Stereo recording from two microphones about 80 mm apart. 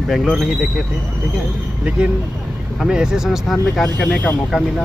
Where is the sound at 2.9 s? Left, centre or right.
Centre.